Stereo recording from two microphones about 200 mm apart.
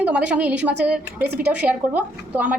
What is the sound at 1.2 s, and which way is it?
Speech, 55° right (ahead or behind).